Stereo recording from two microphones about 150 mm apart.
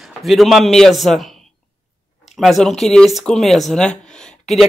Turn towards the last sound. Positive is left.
turn(degrees=0)  # may be behind; listen again after turning